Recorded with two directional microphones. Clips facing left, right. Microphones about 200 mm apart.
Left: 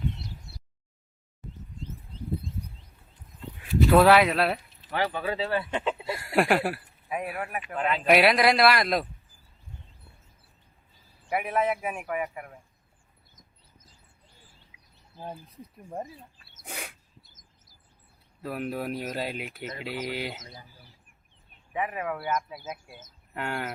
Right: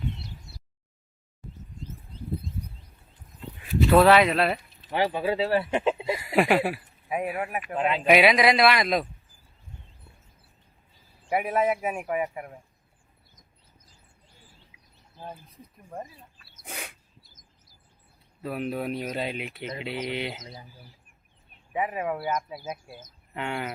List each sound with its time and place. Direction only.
3.6 s speech: centre (ahead or behind)
4.9 s speech: 25° right (ahead or behind)
6.1 s speech: centre (ahead or behind)
7.5 s speech: 25° right (ahead or behind)
8.0 s speech: centre (ahead or behind)
11.3 s speech: 25° right (ahead or behind)
16.6 s bird: centre (ahead or behind)
18.4 s speech: centre (ahead or behind)
21.7 s speech: 25° right (ahead or behind)
23.3 s speech: centre (ahead or behind)